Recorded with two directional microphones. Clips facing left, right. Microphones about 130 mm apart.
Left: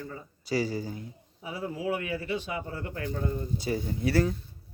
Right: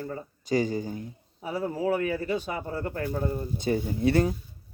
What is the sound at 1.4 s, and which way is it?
Speech, 45° right (ahead or behind).